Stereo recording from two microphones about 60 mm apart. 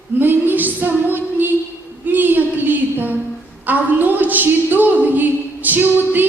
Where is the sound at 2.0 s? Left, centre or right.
Right.